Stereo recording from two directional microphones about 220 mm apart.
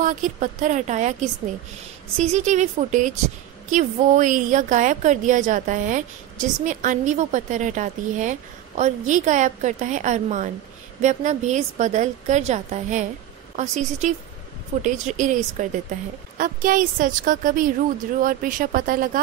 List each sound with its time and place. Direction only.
0.0 s a woman's voice: 35° right (ahead or behind)
2.1 s a woman's voice: 35° right (ahead or behind)